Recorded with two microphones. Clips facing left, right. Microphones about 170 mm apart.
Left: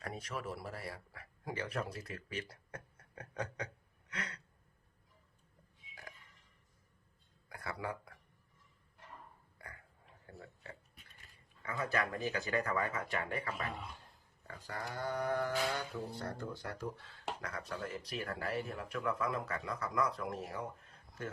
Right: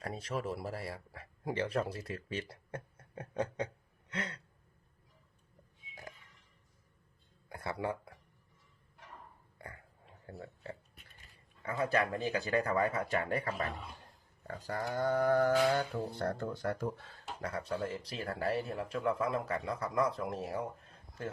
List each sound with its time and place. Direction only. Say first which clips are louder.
0.0 s speech: right 5 dB; 30° right (ahead or behind)
7.5 s a sound: right 5 dB; 25° right (ahead or behind)
9.6 s a sound: right 5 dB; 30° right (ahead or behind)
11.6 s speech: right 5 dB; 30° right (ahead or behind)
15.6 s speech: right 7 dB; 60° right (ahead or behind)
17.4 s speech: right 10 dB; 30° right (ahead or behind)